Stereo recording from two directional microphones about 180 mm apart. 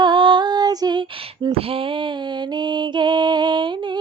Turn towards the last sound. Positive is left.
turn(degrees=-25)  # may be behind; listen again after turning